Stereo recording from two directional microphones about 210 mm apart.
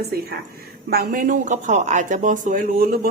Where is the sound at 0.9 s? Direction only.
45° right (ahead or behind).